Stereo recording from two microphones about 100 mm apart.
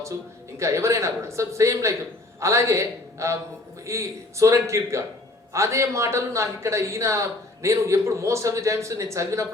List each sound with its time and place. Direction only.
0.6 s a man's voice: 30° right (ahead or behind)